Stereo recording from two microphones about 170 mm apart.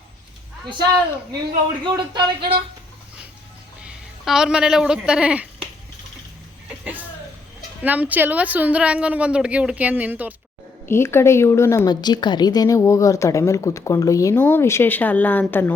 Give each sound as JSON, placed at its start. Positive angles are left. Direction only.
{"t": 1.8, "sound": "speech", "side_deg": -30}
{"t": 3.8, "sound": "speech", "side_deg": -5}
{"t": 6.7, "sound": "a sound", "side_deg": -10}
{"t": 7.8, "sound": "speech", "side_deg": -10}
{"t": 10.8, "sound": "a woman's voice", "side_deg": 15}